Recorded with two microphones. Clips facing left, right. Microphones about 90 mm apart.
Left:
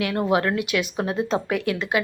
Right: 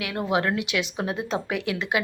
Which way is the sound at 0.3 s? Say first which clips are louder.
Right 1 dB; 15° right (ahead or behind).